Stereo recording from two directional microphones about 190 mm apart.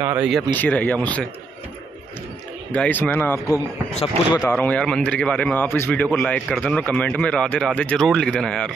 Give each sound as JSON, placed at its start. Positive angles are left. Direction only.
{"t": 0.0, "sound": "speech", "side_deg": -10}
{"t": 0.3, "sound": "speech", "side_deg": 5}
{"t": 2.7, "sound": "speech", "side_deg": 10}
{"t": 3.9, "sound": "speech", "side_deg": 30}
{"t": 4.4, "sound": "a man's voice", "side_deg": 10}